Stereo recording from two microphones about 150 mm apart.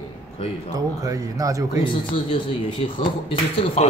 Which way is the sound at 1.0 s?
20° right (ahead or behind).